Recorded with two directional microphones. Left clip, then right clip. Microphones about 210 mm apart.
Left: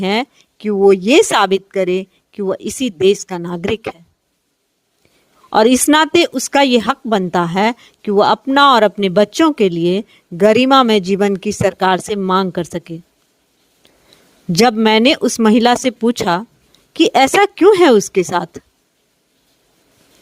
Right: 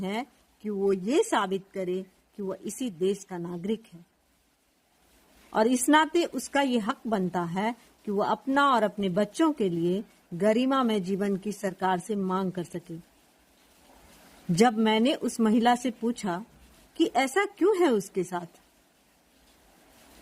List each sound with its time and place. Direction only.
0.0 s speech: 45° left (ahead or behind)
5.5 s speech: 45° left (ahead or behind)
14.5 s speech: 45° left (ahead or behind)